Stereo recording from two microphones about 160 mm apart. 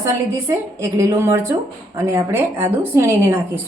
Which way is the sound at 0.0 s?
15° right (ahead or behind).